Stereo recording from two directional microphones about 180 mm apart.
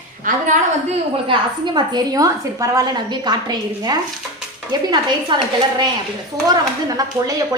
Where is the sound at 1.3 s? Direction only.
25° right (ahead or behind).